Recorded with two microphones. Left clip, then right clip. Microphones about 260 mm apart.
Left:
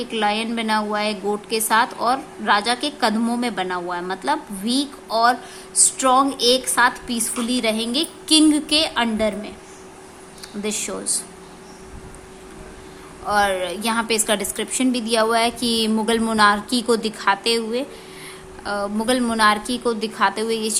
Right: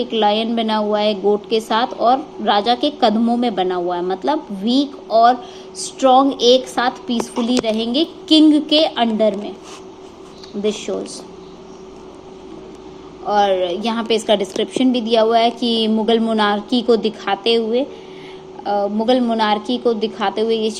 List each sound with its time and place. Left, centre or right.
0.0 s a woman's voice: centre
10.6 s a woman's voice: centre
10.9 s speech: left
13.2 s a woman's voice: centre